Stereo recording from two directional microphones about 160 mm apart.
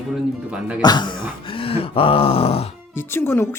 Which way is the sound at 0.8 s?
25° left (ahead or behind).